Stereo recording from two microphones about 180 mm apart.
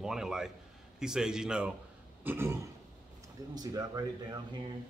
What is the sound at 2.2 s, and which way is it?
Throat clearing, 10° right (ahead or behind).